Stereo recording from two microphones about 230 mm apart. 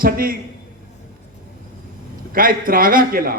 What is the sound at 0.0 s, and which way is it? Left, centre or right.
Speech, right.